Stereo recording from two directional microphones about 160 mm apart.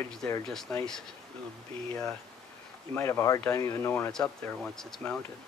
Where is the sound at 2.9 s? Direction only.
20° left (ahead or behind).